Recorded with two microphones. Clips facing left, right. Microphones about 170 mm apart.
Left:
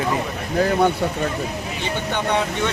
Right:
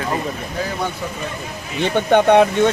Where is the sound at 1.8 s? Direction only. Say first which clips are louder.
Right 11 dB; 60° right (ahead or behind).